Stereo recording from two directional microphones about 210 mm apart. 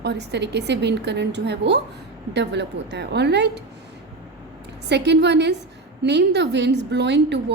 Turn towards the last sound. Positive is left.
turn(degrees=-55)  # may be behind; listen again after turning